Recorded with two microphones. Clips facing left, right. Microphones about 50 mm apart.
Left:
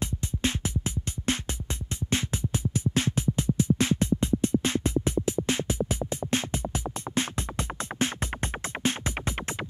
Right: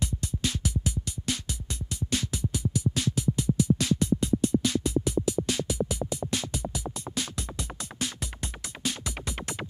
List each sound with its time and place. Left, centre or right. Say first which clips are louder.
0.0 s music: left 2 dB; left